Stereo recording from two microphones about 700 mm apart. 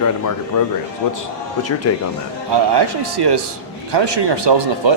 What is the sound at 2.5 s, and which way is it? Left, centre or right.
Speech, right.